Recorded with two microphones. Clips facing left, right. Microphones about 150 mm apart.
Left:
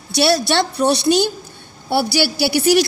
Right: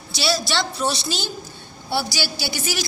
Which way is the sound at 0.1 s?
65° left (ahead or behind).